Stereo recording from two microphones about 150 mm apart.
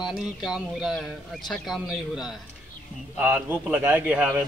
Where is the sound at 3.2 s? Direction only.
10° right (ahead or behind).